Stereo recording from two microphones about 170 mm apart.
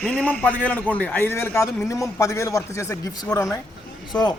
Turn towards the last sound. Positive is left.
turn(degrees=25)  # may be behind; listen again after turning